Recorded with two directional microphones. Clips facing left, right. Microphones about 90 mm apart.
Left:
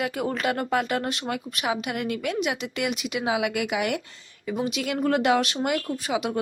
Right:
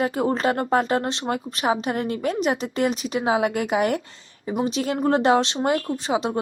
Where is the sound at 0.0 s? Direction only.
30° right (ahead or behind).